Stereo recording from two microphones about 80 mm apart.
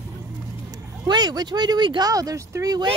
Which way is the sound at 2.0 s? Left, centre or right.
Right.